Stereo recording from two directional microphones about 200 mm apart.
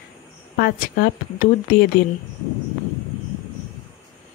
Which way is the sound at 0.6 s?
50° left (ahead or behind).